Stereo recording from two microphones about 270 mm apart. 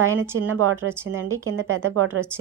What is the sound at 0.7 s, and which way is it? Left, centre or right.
Speech, centre.